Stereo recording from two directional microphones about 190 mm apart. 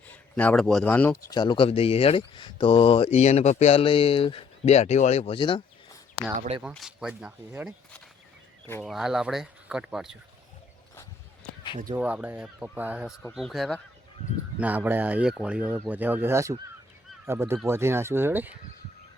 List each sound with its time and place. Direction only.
0.1 s speech: 10° left (ahead or behind)
1.3 s speech: 25° left (ahead or behind)
6.6 s speech: 5° right (ahead or behind)
8.8 s speech: centre (ahead or behind)
11.9 s speech: 5° right (ahead or behind)
14.6 s speech: 10° right (ahead or behind)